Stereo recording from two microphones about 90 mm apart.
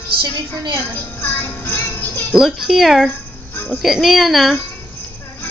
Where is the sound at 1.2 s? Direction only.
25° left (ahead or behind).